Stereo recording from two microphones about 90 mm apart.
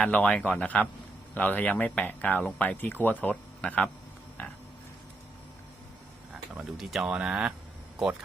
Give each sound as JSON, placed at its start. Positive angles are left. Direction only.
{"t": 0.0, "sound": "a man's voice", "side_deg": 15}
{"t": 6.5, "sound": "speech", "side_deg": -5}